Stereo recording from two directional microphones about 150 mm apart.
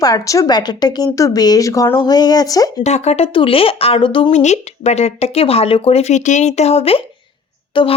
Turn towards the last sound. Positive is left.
turn(degrees=35)  # may be behind; listen again after turning